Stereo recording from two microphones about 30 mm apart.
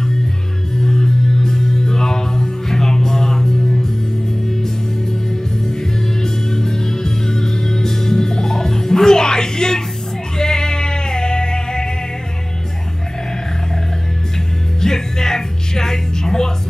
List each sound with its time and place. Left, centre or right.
0.7 s music: centre
5.7 s music: centre
14.8 s music: centre